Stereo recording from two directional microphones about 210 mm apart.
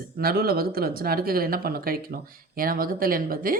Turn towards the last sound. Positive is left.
turn(degrees=-40)  # may be behind; listen again after turning